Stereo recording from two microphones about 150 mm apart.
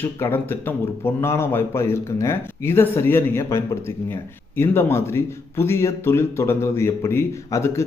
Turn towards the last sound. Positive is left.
turn(degrees=20)  # may be behind; listen again after turning